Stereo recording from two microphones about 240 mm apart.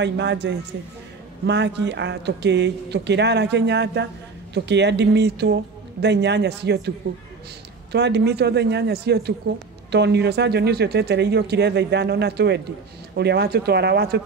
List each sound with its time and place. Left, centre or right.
0.0 s speech: right
7.9 s speech: right